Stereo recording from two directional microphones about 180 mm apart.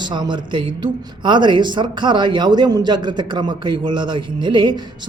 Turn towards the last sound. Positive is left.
turn(degrees=-25)  # may be behind; listen again after turning